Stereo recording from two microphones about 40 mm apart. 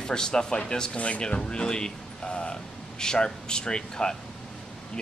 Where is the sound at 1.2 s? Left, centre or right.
Left.